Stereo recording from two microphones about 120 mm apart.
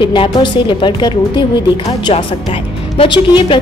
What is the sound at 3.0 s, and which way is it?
Speech, 45° left (ahead or behind).